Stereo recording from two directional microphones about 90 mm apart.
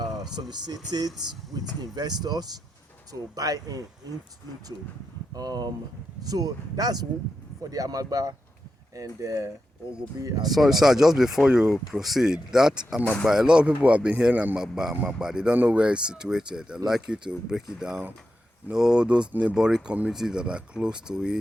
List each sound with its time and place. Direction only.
0.5 s speech: 50° right (ahead or behind)
5.3 s speech: 45° right (ahead or behind)
10.4 s speech: centre (ahead or behind)